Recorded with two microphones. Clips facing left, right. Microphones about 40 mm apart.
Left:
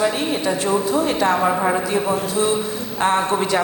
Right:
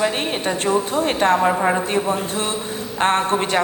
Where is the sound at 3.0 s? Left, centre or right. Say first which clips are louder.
Even; right.